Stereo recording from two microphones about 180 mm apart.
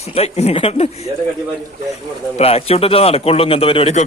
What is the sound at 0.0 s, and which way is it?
A man's voice, 35° left (ahead or behind).